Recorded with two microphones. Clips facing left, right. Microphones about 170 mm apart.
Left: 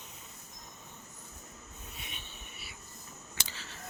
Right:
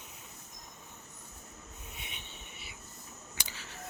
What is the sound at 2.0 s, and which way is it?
Train, 20° right (ahead or behind).